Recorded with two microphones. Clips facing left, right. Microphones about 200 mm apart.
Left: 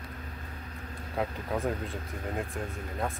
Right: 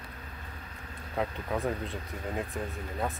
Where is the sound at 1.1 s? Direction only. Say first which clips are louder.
Even; centre (ahead or behind).